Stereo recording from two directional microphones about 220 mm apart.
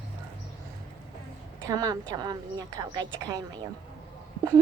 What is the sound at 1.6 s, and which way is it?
A child's voice, 15° right (ahead or behind).